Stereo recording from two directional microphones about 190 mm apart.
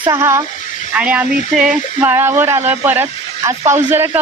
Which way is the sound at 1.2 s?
35° left (ahead or behind).